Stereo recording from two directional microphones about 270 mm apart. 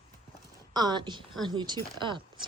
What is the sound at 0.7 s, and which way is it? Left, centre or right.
A woman's voice, centre.